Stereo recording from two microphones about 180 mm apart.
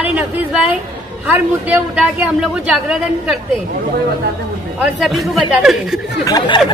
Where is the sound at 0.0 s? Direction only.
10° right (ahead or behind).